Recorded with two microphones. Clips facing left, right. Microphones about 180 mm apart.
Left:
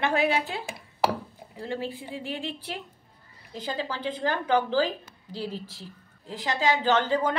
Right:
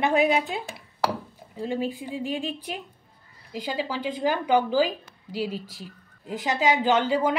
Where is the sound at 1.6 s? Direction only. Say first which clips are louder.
Right 4 dB; 15° right (ahead or behind).